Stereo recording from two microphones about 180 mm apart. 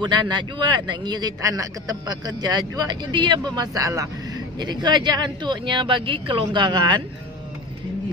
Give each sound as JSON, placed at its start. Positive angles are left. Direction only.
{"t": 0.0, "sound": "speech", "side_deg": -25}